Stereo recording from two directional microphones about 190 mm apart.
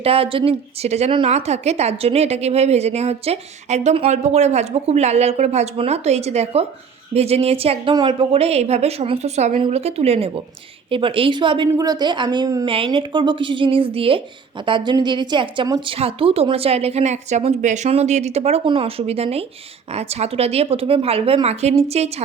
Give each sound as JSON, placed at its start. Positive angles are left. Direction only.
{"t": 0.0, "sound": "a woman's voice", "side_deg": -30}